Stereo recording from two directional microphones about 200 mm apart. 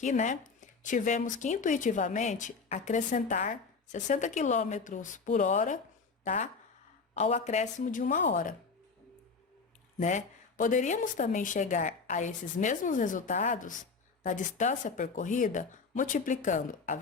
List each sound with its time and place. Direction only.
0.0 s speech: 40° left (ahead or behind)
10.0 s speech: 35° left (ahead or behind)